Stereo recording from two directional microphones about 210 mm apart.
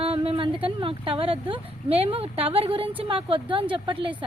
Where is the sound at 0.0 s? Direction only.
25° right (ahead or behind).